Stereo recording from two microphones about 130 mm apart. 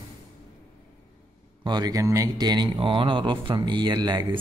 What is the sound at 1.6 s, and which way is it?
Speech, 30° right (ahead or behind).